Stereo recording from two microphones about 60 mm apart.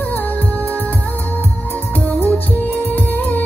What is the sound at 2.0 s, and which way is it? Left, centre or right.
Music, left.